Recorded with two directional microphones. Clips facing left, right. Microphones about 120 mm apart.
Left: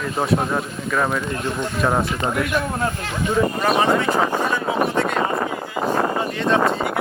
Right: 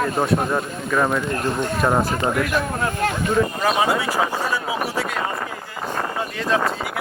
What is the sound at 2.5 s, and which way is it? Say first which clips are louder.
Speech: even; 50° right (ahead or behind).